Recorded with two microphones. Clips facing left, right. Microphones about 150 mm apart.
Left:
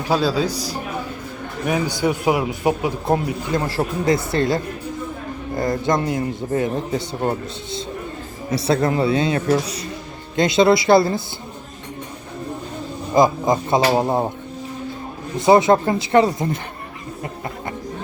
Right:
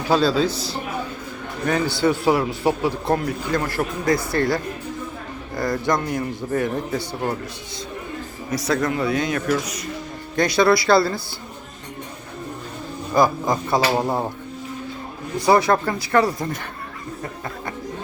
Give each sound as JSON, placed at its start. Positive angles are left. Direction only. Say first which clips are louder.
{"t": 0.1, "sound": "a man's voice", "louder": "right 1 dB", "side_deg": 10}
{"t": 2.0, "sound": "speech", "louder": "right 2 dB", "side_deg": 15}
{"t": 13.1, "sound": "speech", "louder": "left 3 dB", "side_deg": 20}
{"t": 15.4, "sound": "speech", "louder": "left 3 dB", "side_deg": 20}